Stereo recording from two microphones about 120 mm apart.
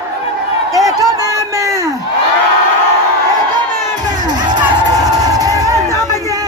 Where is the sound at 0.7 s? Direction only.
30° right (ahead or behind).